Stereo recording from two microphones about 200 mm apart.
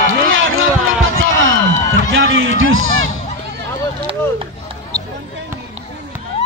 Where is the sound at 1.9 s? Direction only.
75° right (ahead or behind).